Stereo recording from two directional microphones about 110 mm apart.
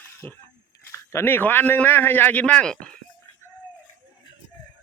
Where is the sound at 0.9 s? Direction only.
20° left (ahead or behind).